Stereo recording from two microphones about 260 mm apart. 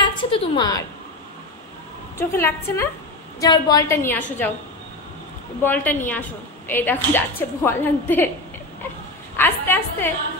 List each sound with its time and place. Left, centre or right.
0.0 s a sound: centre
2.1 s a woman's voice: centre
5.6 s a woman's voice: centre
9.4 s a woman's voice: centre